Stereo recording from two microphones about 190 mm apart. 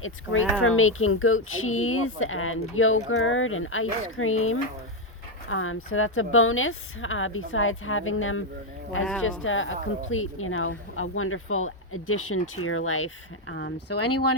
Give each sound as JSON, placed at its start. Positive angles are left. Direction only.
{"t": 0.0, "sound": "speech", "side_deg": 90}
{"t": 13.5, "sound": "speech", "side_deg": 75}